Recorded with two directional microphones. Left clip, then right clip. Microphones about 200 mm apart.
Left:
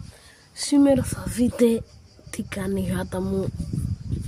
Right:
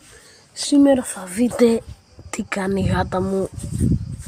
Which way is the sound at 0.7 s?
15° left (ahead or behind).